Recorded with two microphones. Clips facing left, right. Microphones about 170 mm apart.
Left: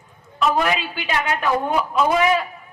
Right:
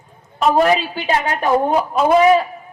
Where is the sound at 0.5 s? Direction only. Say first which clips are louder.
Right 7 dB; 40° right (ahead or behind).